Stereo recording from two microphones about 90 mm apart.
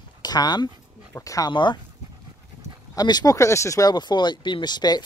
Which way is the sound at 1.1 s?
40° left (ahead or behind).